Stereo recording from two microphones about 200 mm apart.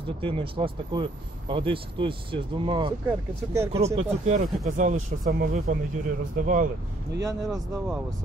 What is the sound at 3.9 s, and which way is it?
Speech, 35° right (ahead or behind).